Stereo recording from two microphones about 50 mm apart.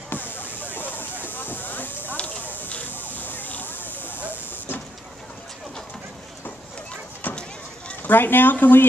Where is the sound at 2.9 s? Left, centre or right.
Left.